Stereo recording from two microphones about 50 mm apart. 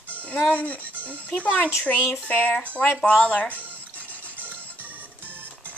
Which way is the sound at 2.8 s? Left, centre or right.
Left.